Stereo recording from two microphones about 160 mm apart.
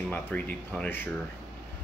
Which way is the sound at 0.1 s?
10° left (ahead or behind).